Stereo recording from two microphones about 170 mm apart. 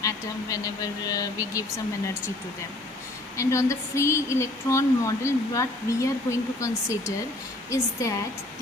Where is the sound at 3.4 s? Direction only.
15° left (ahead or behind).